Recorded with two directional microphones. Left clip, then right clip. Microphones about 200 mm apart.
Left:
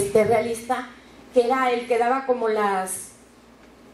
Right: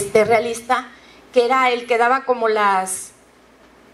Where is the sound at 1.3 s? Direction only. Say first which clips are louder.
Right 4 dB; 40° right (ahead or behind).